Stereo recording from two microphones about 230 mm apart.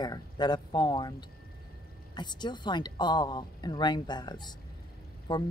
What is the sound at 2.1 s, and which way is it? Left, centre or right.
A woman's voice, centre.